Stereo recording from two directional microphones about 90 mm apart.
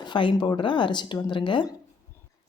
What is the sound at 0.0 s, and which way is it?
Speech, 60° left (ahead or behind).